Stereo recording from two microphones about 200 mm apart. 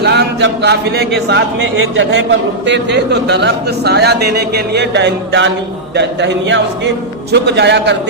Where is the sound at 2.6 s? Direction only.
60° right (ahead or behind).